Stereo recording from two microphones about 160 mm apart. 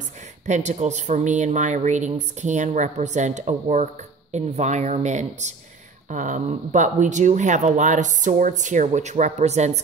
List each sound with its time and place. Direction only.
0.5 s speech: 45° right (ahead or behind)